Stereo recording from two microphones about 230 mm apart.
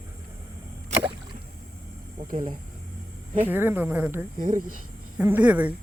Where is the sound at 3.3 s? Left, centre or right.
Centre.